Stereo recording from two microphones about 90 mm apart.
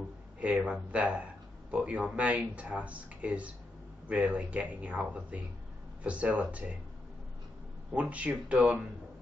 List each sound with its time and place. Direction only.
0.4 s speech: 15° right (ahead or behind)
7.9 s speech: 15° right (ahead or behind)